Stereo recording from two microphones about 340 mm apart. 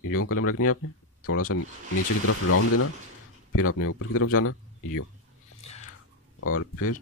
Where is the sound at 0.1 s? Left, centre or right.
Left.